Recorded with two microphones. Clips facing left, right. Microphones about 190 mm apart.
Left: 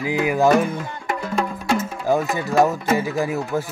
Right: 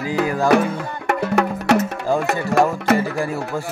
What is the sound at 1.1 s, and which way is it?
Music, 70° right (ahead or behind).